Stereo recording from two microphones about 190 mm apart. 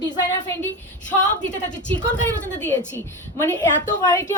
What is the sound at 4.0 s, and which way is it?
Speech, 20° left (ahead or behind).